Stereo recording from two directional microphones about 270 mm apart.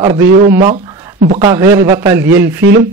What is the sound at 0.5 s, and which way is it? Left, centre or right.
Speech, centre.